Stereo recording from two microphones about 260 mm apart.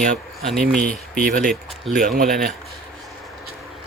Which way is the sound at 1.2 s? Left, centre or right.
Right.